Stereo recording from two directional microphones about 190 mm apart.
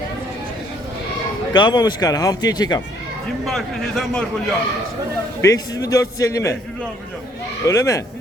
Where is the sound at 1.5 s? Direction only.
25° left (ahead or behind).